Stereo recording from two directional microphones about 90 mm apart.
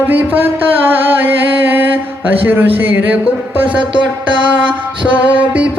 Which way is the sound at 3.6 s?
70° right (ahead or behind).